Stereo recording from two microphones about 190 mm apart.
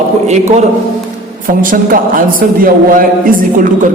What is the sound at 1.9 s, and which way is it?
A man's voice, 45° right (ahead or behind).